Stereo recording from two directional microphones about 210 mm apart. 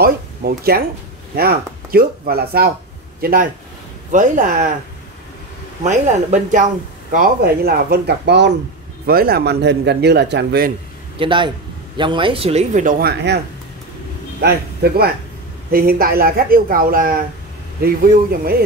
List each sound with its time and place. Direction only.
0.0 s speech: 45° right (ahead or behind)
5.9 s a man's voice: 35° right (ahead or behind); by 10.7 s 50° right (ahead or behind)
11.1 s a man's voice: 25° right (ahead or behind); by 13.4 s 50° right (ahead or behind)
14.4 s a man's voice: 50° right (ahead or behind)